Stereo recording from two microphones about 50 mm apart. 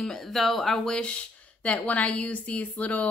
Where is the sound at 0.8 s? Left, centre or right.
Centre.